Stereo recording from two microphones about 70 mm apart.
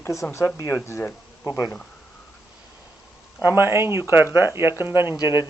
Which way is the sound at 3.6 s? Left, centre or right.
Right.